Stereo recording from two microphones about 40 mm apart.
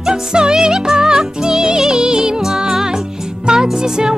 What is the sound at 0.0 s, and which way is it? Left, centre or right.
Music, centre.